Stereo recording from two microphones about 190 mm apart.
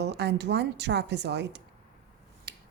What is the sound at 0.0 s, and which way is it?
A woman's voice, 60° right (ahead or behind).